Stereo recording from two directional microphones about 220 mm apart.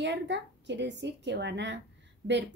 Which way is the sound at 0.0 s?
50° right (ahead or behind).